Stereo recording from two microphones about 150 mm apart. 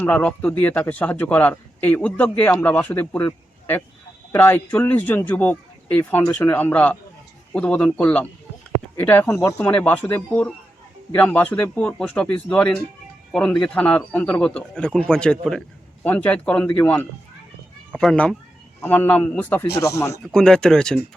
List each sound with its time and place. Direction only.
0.0 s speech: 10° left (ahead or behind)
9.6 s speech: 10° left (ahead or behind)
20.3 s speech: 5° left (ahead or behind)